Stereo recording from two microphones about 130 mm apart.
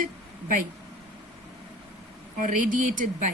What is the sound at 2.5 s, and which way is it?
Speech, 90° right.